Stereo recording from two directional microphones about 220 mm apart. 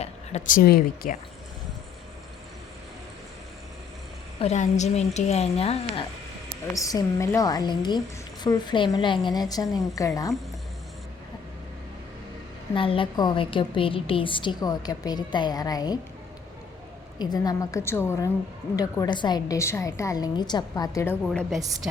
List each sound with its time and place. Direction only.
0.0 s a woman's voice: 35° left (ahead or behind)
4.4 s a woman's voice: 30° left (ahead or behind)
6.7 s a woman's voice: 15° left (ahead or behind)
12.7 s a woman's voice: 25° left (ahead or behind)
17.2 s a woman's voice: 15° left (ahead or behind)